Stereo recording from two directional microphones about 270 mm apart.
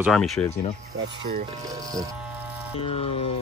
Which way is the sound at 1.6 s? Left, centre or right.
Centre.